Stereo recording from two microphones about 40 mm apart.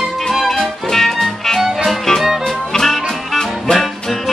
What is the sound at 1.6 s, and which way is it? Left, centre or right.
Music, centre.